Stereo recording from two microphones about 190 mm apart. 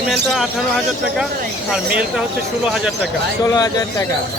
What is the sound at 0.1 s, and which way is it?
Speech, centre (ahead or behind).